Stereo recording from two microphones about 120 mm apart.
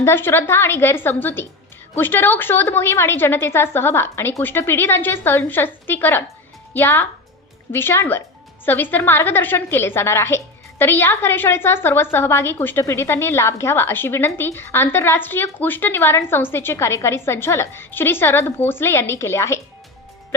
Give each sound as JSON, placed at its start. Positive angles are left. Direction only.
{"t": 0.0, "sound": "a woman's voice", "side_deg": 20}